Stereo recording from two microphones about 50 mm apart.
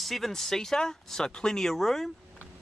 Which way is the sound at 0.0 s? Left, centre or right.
Centre.